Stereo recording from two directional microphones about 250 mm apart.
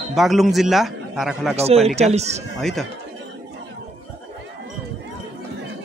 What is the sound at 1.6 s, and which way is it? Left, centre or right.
Speech, right.